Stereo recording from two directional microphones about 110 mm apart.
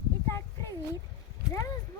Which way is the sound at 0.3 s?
25° left (ahead or behind).